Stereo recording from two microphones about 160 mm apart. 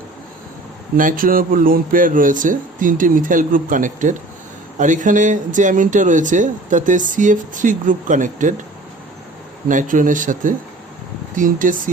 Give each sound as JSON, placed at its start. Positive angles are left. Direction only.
{"t": 0.9, "sound": "speech", "side_deg": -60}
{"t": 9.6, "sound": "speech", "side_deg": -55}